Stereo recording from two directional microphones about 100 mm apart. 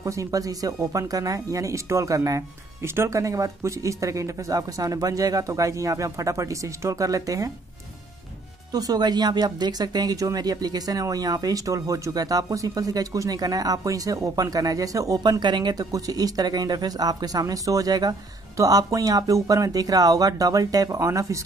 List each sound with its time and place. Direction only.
0.0 s speech: 35° right (ahead or behind)
8.7 s speech: 40° right (ahead or behind)